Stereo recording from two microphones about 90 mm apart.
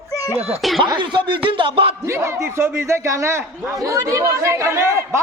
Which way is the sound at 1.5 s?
75° right (ahead or behind).